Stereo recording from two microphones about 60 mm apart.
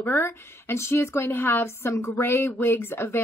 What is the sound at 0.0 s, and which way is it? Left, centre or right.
Speech, left.